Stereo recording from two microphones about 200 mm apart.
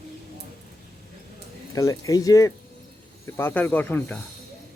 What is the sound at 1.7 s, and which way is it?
Speech, 15° left (ahead or behind).